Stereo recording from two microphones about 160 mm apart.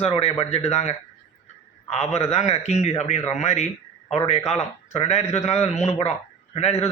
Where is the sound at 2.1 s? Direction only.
45° left (ahead or behind).